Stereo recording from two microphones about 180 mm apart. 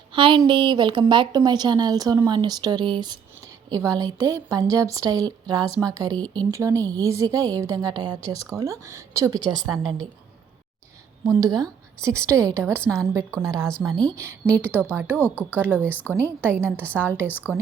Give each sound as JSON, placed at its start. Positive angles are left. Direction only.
{"t": 0.1, "sound": "a woman's voice", "side_deg": -30}
{"t": 11.3, "sound": "a woman's voice", "side_deg": -20}
{"t": 14.7, "sound": "speech", "side_deg": 10}
{"t": 16.5, "sound": "a woman's voice", "side_deg": -10}